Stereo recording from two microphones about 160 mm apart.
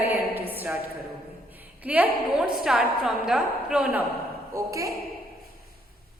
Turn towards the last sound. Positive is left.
turn(degrees=-20)  # may be behind; listen again after turning